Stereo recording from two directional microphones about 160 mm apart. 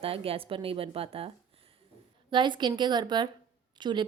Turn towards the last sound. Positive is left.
turn(degrees=-30)  # may be behind; listen again after turning